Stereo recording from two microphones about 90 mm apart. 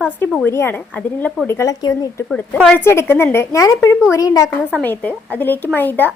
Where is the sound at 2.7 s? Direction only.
30° left (ahead or behind).